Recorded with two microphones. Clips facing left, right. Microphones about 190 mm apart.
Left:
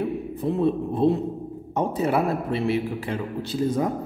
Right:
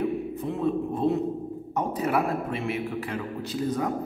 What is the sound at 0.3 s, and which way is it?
A man's voice, 35° left (ahead or behind).